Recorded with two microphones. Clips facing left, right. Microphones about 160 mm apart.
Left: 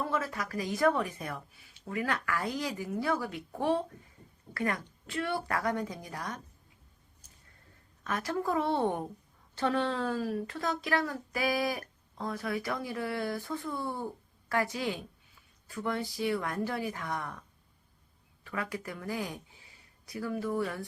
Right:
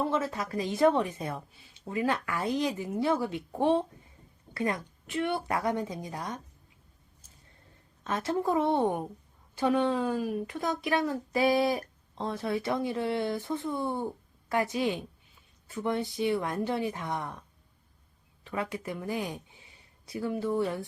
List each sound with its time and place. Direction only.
0.0 s speech: 25° right (ahead or behind)
8.0 s a woman's voice: 25° right (ahead or behind)
18.4 s speech: 25° right (ahead or behind)